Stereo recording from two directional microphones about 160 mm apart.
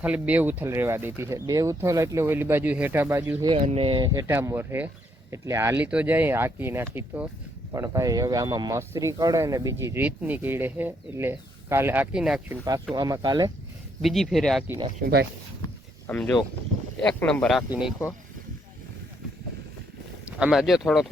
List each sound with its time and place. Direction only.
0.0 s speech: 10° right (ahead or behind)
3.5 s speech: 35° right (ahead or behind); by 12.5 s 5° right (ahead or behind)
12.9 s speech: 25° right (ahead or behind)
14.0 s speech: centre (ahead or behind)
15.0 s speech: 90° right
16.0 s speech: 10° left (ahead or behind)
17.7 s speech: 5° right (ahead or behind)
20.2 s speech: 5° right (ahead or behind)